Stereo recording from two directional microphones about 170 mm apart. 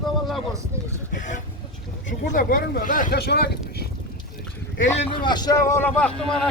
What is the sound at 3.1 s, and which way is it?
Speech, 70° left (ahead or behind).